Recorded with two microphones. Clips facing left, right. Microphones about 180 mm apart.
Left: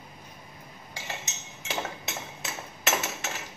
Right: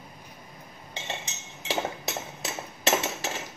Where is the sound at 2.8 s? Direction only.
30° right (ahead or behind).